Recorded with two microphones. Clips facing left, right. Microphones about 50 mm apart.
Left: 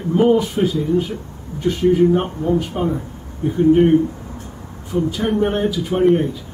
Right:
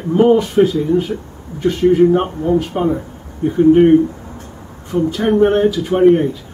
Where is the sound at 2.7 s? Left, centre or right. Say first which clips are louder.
Right 4 dB; centre.